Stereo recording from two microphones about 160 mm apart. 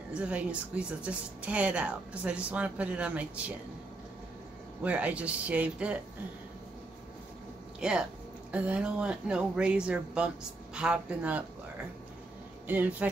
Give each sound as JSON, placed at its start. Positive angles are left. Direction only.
{"t": 0.1, "sound": "speech", "side_deg": -10}
{"t": 4.8, "sound": "speech", "side_deg": -10}
{"t": 7.8, "sound": "speech", "side_deg": -5}
{"t": 12.6, "sound": "speech", "side_deg": -10}